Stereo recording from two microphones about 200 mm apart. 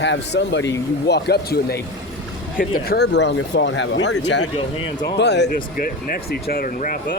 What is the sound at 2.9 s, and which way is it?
Speech, 60° left (ahead or behind).